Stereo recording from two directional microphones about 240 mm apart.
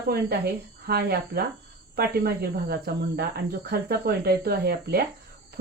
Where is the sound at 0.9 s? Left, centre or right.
Right.